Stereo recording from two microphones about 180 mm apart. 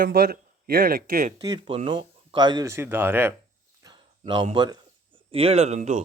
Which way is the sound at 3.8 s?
25° right (ahead or behind).